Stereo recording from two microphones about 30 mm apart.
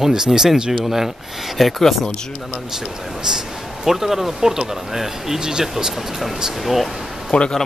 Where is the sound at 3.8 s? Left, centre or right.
Centre.